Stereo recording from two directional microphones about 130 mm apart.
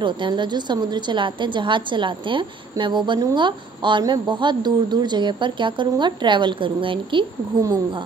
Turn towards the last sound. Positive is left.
turn(degrees=-30)  # may be behind; listen again after turning